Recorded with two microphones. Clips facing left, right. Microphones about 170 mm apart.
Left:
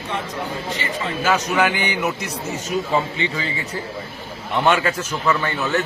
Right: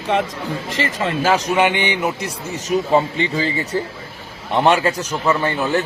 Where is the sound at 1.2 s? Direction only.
30° right (ahead or behind).